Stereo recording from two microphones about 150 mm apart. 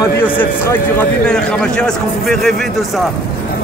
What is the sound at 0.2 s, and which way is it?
A man's voice, 15° left (ahead or behind).